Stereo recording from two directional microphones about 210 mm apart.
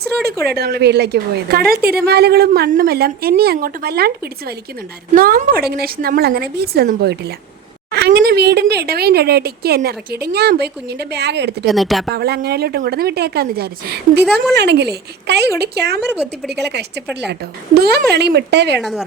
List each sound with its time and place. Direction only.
0.3 s a woman's voice: 50° right (ahead or behind)
11.6 s speech: centre (ahead or behind)
12.1 s a woman's voice: 50° right (ahead or behind)
18.8 s speech: centre (ahead or behind)